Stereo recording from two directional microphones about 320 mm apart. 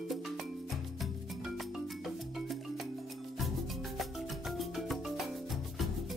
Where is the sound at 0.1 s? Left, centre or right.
Centre.